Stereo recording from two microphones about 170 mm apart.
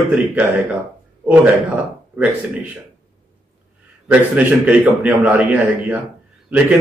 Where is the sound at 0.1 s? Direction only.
10° right (ahead or behind).